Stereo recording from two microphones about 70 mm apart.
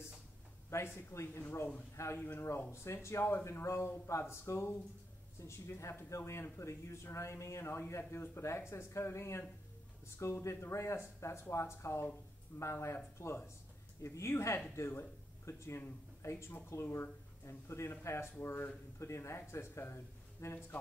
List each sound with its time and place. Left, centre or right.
0.7 s a man's voice: left